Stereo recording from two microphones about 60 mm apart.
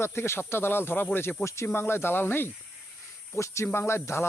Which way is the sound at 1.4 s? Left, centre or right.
Left.